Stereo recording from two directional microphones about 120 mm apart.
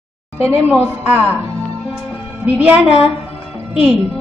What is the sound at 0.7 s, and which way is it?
Speech, 15° right (ahead or behind).